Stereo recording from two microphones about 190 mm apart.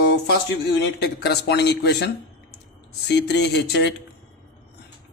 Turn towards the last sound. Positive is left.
turn(degrees=65)  # may be behind; listen again after turning